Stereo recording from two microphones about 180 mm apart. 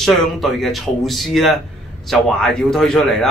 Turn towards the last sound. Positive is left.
turn(degrees=0)  # may be behind; listen again after turning